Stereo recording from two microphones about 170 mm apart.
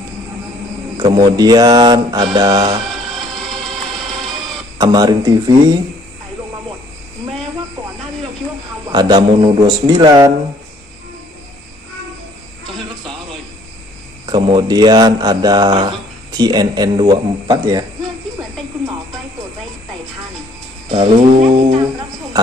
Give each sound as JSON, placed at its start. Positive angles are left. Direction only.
{"t": 0.9, "sound": "speech", "side_deg": -25}
{"t": 4.7, "sound": "speech", "side_deg": -25}
{"t": 8.9, "sound": "speech", "side_deg": -25}
{"t": 14.2, "sound": "speech", "side_deg": -30}
{"t": 21.4, "sound": "speech", "side_deg": -35}